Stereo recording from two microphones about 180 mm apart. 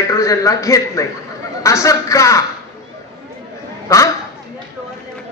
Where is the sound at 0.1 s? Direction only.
15° left (ahead or behind).